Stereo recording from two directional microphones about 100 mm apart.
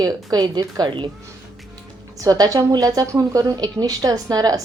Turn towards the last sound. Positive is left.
turn(degrees=-40)  # may be behind; listen again after turning